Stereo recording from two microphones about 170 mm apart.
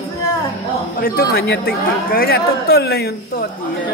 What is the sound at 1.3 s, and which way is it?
A woman's voice, 65° left (ahead or behind).